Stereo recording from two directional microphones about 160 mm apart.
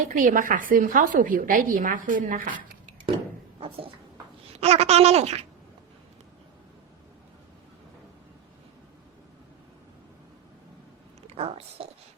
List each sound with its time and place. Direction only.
0.1 s a woman's voice: 55° right (ahead or behind)
4.5 s speech: 40° right (ahead or behind)
11.3 s speech: 40° right (ahead or behind)